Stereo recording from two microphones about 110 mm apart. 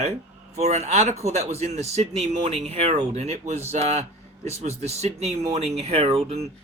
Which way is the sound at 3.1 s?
85° right.